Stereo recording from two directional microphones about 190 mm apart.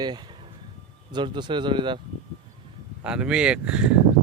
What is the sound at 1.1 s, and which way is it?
Speech, 25° right (ahead or behind).